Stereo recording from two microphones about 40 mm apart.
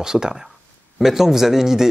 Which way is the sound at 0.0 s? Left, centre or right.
Centre.